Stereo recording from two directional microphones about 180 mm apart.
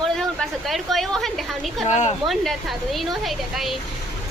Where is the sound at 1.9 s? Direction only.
40° left (ahead or behind).